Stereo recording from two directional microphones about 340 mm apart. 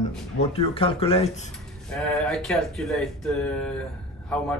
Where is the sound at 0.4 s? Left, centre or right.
Centre.